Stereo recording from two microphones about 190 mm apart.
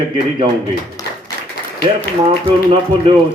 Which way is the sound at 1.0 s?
20° left (ahead or behind).